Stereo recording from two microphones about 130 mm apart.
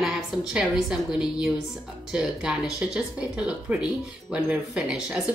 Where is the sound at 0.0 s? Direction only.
5° right (ahead or behind).